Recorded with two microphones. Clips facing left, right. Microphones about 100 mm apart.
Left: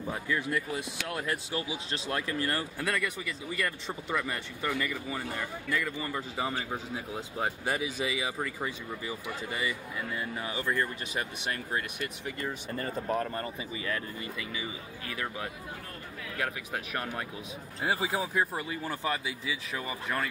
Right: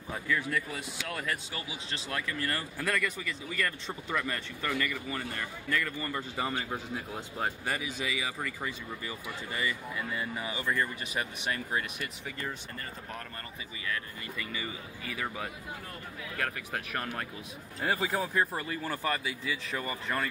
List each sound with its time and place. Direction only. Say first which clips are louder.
0.1 s speech: even; 10° left (ahead or behind)
9.9 s speech: even; 5° right (ahead or behind)
12.3 s speech: left 3 dB; 5° left (ahead or behind)
12.7 s speech: left 10 dB; 30° left (ahead or behind)
14.4 s speech: right 2 dB; 10° left (ahead or behind)
15.0 s speech: even; centre (ahead or behind)